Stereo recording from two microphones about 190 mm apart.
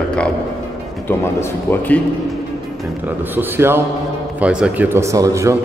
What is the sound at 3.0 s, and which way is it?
A man's voice, 10° right (ahead or behind).